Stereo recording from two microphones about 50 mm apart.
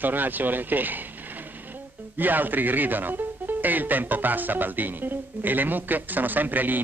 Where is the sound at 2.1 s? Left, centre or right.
Right.